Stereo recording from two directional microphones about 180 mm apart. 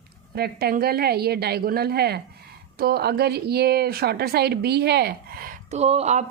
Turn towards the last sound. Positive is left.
turn(degrees=-40)  # may be behind; listen again after turning